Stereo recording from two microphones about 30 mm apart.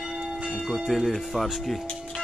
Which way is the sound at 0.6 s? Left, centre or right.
Centre.